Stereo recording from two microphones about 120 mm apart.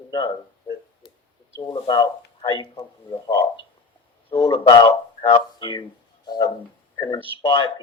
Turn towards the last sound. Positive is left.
turn(degrees=40)  # may be behind; listen again after turning